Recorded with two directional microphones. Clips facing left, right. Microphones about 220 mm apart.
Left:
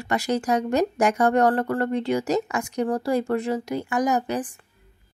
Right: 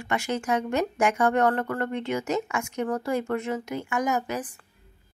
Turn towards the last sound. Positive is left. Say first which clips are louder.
# left 4 dB
turn(degrees=35)  # may be behind; listen again after turning